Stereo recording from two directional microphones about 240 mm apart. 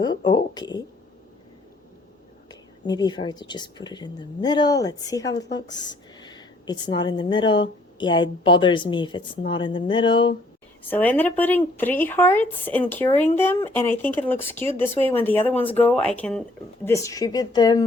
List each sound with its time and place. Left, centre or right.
0.5 s speech: centre
2.5 s speech: centre
10.8 s speech: centre